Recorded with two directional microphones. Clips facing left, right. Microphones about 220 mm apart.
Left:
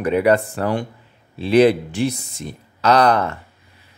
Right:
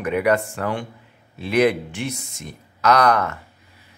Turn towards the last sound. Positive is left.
turn(degrees=30)  # may be behind; listen again after turning